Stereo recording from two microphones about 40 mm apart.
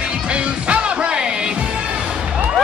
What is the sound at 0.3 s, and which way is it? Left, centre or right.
Music, right.